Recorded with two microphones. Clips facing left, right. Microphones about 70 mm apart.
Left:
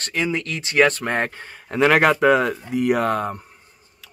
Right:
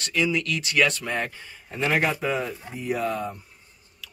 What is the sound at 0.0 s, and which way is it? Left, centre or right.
Speech, left.